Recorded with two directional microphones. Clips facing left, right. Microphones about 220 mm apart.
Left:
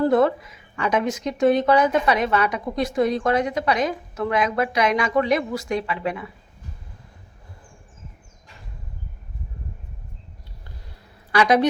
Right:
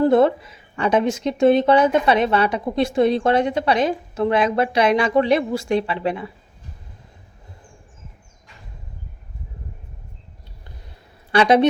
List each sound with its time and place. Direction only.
0.0 s a woman's voice: 25° right (ahead or behind)
11.3 s a woman's voice: 25° right (ahead or behind)